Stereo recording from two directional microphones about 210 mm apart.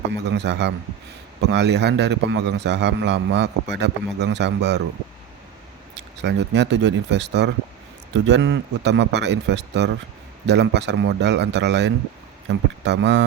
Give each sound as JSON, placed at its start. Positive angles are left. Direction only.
{"t": 0.3, "sound": "a man's voice", "side_deg": -55}
{"t": 5.9, "sound": "a man's voice", "side_deg": -55}